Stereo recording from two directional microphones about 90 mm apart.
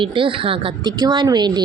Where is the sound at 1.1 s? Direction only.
55° right (ahead or behind).